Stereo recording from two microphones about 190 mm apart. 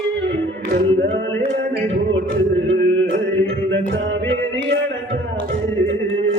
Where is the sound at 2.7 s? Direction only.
70° right (ahead or behind).